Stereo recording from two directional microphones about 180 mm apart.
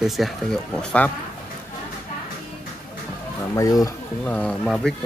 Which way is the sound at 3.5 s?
20° left (ahead or behind).